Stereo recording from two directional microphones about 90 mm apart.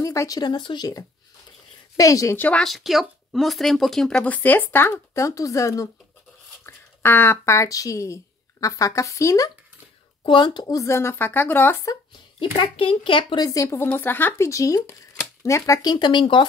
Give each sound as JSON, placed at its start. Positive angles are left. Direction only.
{"t": 0.0, "sound": "speech", "side_deg": 35}
{"t": 0.4, "sound": "a woman's voice", "side_deg": 60}
{"t": 2.0, "sound": "speech", "side_deg": 40}
{"t": 2.3, "sound": "speech", "side_deg": 20}
{"t": 2.6, "sound": "speech", "side_deg": 0}
{"t": 4.2, "sound": "speech", "side_deg": 20}
{"t": 6.6, "sound": "speech", "side_deg": 25}
{"t": 10.2, "sound": "a woman's voice", "side_deg": 60}
{"t": 10.7, "sound": "speech", "side_deg": 35}
{"t": 12.4, "sound": "speech", "side_deg": 70}
{"t": 13.4, "sound": "speech", "side_deg": 40}
{"t": 14.5, "sound": "speech", "side_deg": 35}